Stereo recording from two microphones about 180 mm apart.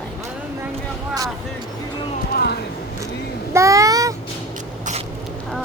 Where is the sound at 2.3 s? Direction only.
60° left (ahead or behind).